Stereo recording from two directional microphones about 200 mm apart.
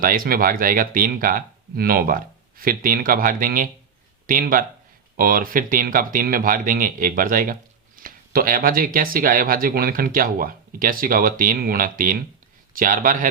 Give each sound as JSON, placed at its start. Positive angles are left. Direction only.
{"t": 0.0, "sound": "speech", "side_deg": -45}